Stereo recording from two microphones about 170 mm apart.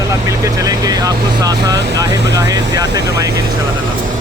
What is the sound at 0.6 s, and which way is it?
Speech, 20° right (ahead or behind).